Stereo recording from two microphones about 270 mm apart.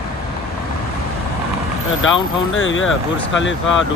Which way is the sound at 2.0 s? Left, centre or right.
Left.